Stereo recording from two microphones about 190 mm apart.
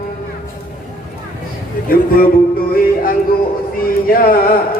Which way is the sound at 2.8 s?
50° left (ahead or behind).